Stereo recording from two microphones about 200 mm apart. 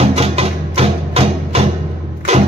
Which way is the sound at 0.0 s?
30° right (ahead or behind).